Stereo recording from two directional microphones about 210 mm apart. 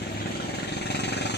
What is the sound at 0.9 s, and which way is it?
Vehicle, 50° left (ahead or behind).